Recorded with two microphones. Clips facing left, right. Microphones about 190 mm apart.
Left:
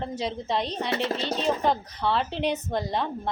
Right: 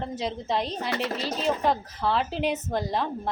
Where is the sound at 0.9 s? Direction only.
25° left (ahead or behind).